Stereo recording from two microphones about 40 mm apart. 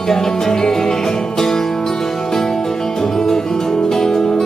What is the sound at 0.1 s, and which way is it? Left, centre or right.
Music, centre.